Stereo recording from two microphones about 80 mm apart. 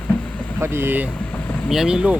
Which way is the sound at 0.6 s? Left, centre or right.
Right.